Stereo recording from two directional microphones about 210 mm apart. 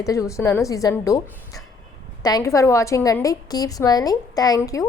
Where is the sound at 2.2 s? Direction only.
15° left (ahead or behind).